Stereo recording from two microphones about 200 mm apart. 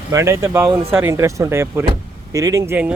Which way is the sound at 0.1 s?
15° right (ahead or behind).